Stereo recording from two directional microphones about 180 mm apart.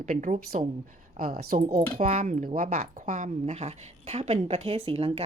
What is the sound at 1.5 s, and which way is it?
Speech, 40° right (ahead or behind).